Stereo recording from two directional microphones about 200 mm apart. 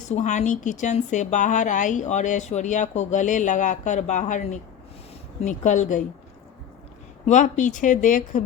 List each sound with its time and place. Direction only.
0.1 s speech: 35° left (ahead or behind)
7.3 s speech: 40° left (ahead or behind)